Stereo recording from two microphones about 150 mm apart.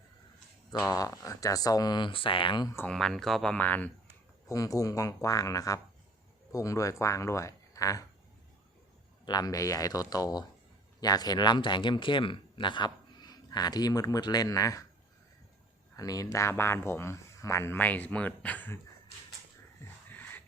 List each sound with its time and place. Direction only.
0.9 s speech: 25° left (ahead or behind)
2.7 s speech: 5° left (ahead or behind)
4.4 s speech: 20° left (ahead or behind)
9.2 s speech: 25° left (ahead or behind)
16.0 s speech: 25° left (ahead or behind)